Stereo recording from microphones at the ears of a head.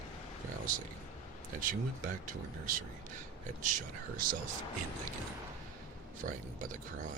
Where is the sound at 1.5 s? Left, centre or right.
Right.